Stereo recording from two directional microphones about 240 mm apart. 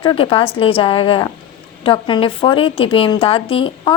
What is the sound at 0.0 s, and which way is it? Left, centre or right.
A woman's voice, left.